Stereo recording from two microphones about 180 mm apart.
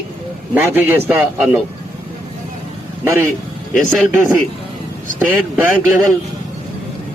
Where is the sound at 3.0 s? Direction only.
15° right (ahead or behind).